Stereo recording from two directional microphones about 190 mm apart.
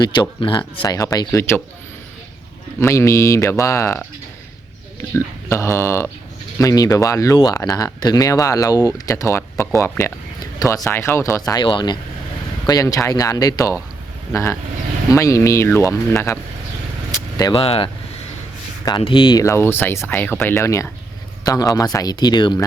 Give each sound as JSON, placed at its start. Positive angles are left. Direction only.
{"t": 0.0, "sound": "speech", "side_deg": 25}
{"t": 2.8, "sound": "speech", "side_deg": 15}
{"t": 15.1, "sound": "speech", "side_deg": 15}